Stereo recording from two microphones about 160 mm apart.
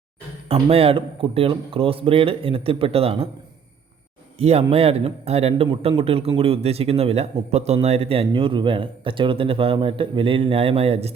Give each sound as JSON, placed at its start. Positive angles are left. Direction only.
{"t": 0.4, "sound": "speech", "side_deg": -35}
{"t": 4.4, "sound": "speech", "side_deg": -40}